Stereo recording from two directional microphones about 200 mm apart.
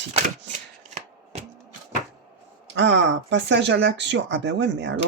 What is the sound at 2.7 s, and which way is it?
Speech, 60° right (ahead or behind).